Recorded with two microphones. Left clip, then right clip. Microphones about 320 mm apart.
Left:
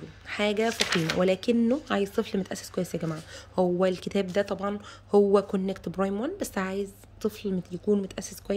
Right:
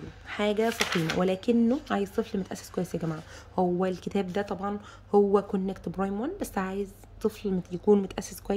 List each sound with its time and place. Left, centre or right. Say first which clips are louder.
0.3 s speech: left 1 dB; centre